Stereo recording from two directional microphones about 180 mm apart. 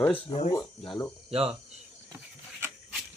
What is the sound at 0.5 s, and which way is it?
Speech, 20° left (ahead or behind).